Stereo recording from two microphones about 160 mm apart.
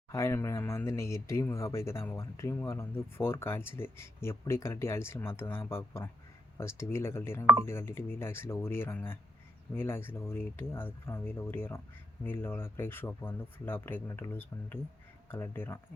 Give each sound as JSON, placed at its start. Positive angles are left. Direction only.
{"t": 0.1, "sound": "speech", "side_deg": 15}